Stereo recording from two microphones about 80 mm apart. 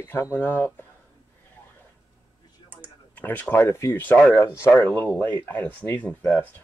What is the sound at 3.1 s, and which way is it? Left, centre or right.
Speech, left.